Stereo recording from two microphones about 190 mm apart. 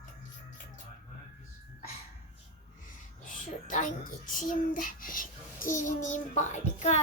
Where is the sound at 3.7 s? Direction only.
40° left (ahead or behind).